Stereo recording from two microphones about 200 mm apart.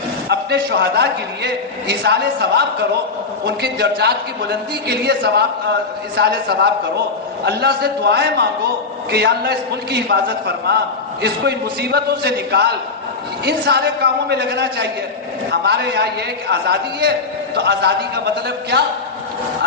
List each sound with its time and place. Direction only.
0.3 s a man's voice: 60° right (ahead or behind)